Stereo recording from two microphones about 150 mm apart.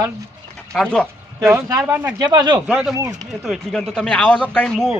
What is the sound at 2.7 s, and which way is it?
Speech, 5° right (ahead or behind).